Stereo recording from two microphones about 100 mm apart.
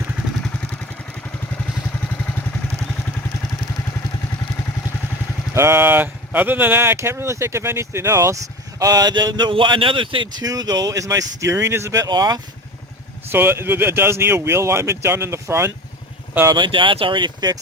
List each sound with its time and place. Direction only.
5.5 s speech: 25° right (ahead or behind)
8.8 s speech: 40° right (ahead or behind); by 10.4 s 55° right (ahead or behind)
10.4 s speech: 40° right (ahead or behind)
12.0 s speech: 45° right (ahead or behind)
13.3 s speech: 20° right (ahead or behind)
16.5 s speech: 55° right (ahead or behind)